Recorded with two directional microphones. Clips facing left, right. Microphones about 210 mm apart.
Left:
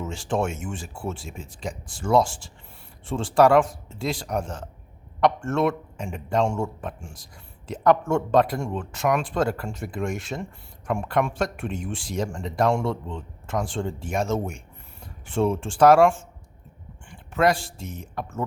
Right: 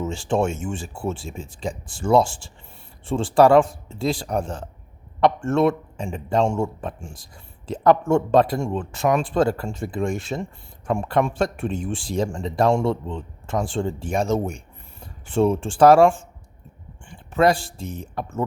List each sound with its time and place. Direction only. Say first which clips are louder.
0.0 s speech: right 4 dB; 30° right (ahead or behind)